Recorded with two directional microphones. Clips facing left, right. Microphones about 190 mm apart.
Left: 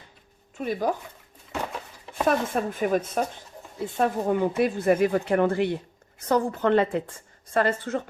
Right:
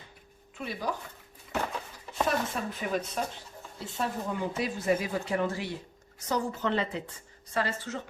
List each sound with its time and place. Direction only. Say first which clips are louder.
0.6 s speech: left 8 dB; 50° left (ahead or behind)
2.2 s speech: left 7 dB; 50° left (ahead or behind)